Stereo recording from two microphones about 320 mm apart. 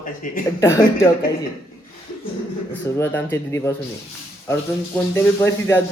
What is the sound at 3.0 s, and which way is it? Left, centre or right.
Speech, centre.